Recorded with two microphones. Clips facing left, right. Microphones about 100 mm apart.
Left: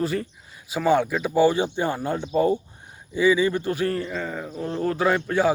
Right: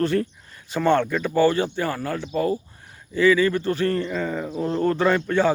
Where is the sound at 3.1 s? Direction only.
15° left (ahead or behind).